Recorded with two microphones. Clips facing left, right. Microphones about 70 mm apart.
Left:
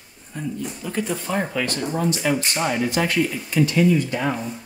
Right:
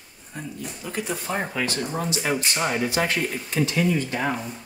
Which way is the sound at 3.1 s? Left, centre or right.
Right.